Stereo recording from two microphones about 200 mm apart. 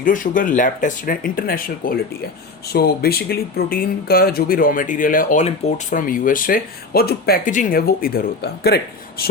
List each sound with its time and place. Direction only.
0.0 s speech: 40° left (ahead or behind)